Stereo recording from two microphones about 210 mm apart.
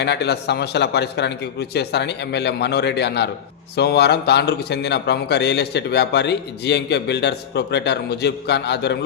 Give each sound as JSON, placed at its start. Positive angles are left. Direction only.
{"t": 0.0, "sound": "a man's voice", "side_deg": 50}